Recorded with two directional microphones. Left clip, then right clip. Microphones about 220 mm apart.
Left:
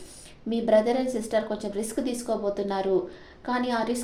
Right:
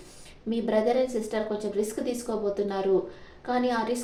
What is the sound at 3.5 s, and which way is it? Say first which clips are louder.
Speech: even; 35° left (ahead or behind).